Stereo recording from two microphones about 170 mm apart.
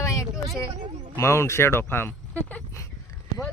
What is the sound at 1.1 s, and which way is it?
Speech, 15° left (ahead or behind).